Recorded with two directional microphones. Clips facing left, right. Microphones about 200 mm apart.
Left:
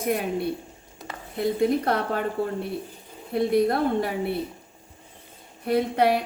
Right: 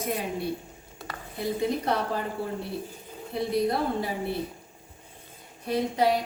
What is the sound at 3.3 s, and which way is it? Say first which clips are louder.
Speech: left 5 dB; 60° left (ahead or behind).